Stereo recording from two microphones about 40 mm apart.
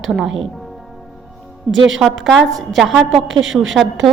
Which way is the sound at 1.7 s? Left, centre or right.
Left.